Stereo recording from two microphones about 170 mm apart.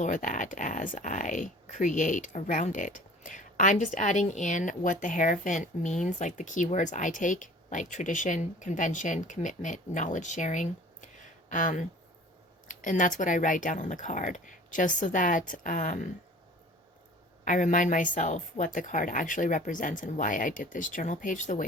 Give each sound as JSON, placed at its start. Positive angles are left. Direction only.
{"t": 0.0, "sound": "speech", "side_deg": 50}
{"t": 17.4, "sound": "speech", "side_deg": 50}